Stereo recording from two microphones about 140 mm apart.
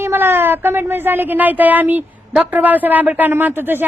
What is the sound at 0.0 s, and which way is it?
A woman's voice, 15° right (ahead or behind).